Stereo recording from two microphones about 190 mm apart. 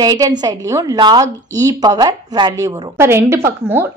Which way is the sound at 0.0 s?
20° right (ahead or behind).